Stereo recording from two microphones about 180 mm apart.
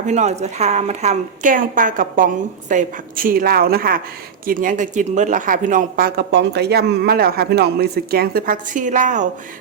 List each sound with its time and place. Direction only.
0.0 s speech: 40° right (ahead or behind)